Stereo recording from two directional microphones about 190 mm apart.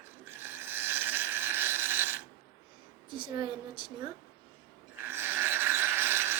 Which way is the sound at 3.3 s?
25° right (ahead or behind).